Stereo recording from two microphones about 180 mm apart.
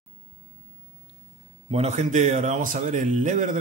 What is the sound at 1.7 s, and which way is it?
Speech, 40° right (ahead or behind).